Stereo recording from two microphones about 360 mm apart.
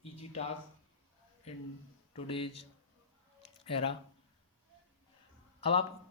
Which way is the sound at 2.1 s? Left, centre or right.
Centre.